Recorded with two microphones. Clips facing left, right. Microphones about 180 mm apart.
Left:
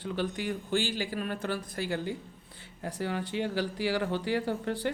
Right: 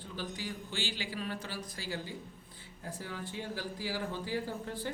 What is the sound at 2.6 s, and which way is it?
Speech, 75° left (ahead or behind).